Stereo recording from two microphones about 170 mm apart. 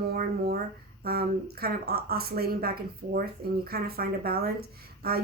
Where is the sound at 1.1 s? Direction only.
65° right (ahead or behind).